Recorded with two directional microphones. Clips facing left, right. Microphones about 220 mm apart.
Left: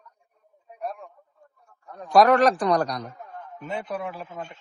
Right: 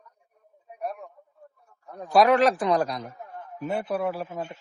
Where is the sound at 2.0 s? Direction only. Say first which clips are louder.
Left 2 dB; 5° right (ahead or behind).